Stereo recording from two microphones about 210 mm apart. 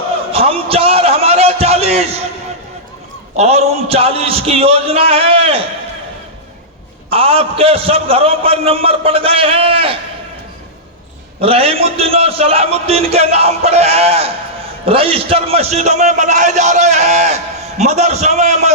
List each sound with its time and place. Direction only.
0.3 s a sound: 25° right (ahead or behind)
3.3 s a man's voice: 30° right (ahead or behind)
7.1 s a man's voice: 25° right (ahead or behind)
11.3 s a man's voice: 25° right (ahead or behind)